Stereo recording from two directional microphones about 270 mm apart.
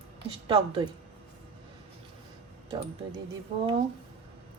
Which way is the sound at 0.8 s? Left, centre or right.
Centre.